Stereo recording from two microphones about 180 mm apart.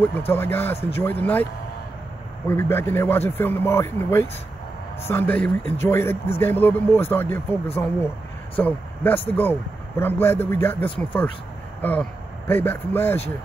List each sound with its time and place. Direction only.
0.3 s a man's voice: 10° left (ahead or behind)